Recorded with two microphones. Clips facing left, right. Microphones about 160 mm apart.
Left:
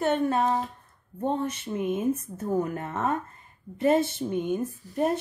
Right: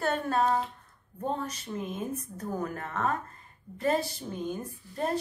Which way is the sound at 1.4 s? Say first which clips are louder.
Left 6 dB; 25° left (ahead or behind).